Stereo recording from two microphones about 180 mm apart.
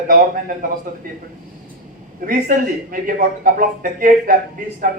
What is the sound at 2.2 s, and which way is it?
A man's voice, 50° right (ahead or behind).